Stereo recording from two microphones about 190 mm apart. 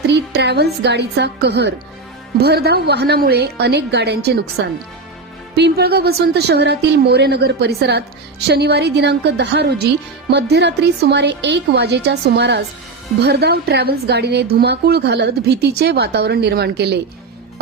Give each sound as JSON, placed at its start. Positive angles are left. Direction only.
{"t": 0.1, "sound": "a woman's voice", "side_deg": -60}